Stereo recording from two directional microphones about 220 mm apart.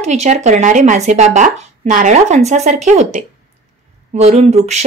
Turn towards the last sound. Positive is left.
turn(degrees=-30)  # may be behind; listen again after turning